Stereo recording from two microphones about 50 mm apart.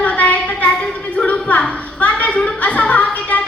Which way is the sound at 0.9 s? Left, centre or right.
Left.